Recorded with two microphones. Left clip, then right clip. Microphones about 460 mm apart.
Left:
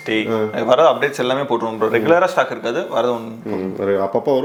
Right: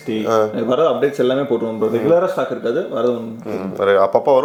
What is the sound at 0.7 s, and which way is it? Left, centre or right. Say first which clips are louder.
Speech: left 3 dB; left.